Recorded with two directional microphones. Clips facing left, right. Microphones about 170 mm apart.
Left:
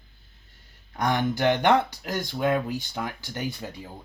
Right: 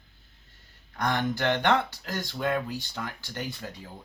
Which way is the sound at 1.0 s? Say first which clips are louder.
Left 4 dB; 15° left (ahead or behind).